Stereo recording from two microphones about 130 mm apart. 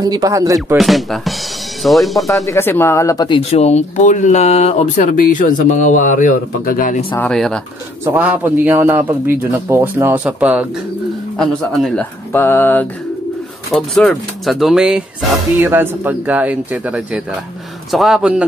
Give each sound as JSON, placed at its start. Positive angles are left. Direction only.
{"t": 0.0, "sound": "speech", "side_deg": -30}
{"t": 0.7, "sound": "speech", "side_deg": 0}
{"t": 2.4, "sound": "speech", "side_deg": 20}
{"t": 3.5, "sound": "speech", "side_deg": 60}
{"t": 7.1, "sound": "mantra", "side_deg": 15}
{"t": 7.3, "sound": "speech", "side_deg": 5}
{"t": 8.0, "sound": "a man's voice", "side_deg": -15}
{"t": 11.3, "sound": "speech", "side_deg": 5}
{"t": 12.3, "sound": "mantra", "side_deg": 15}
{"t": 13.7, "sound": "speech", "side_deg": 5}
{"t": 15.6, "sound": "a man's voice", "side_deg": -15}